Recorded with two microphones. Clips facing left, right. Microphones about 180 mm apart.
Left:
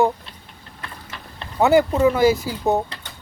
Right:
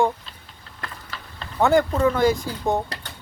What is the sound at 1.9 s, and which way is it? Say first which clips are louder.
Speech: left 3 dB; 15° left (ahead or behind).